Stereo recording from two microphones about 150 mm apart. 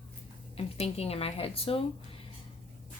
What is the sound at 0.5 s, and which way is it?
Speech, 40° left (ahead or behind).